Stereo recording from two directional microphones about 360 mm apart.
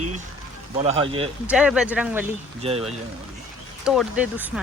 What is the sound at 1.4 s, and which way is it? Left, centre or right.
Speech, centre.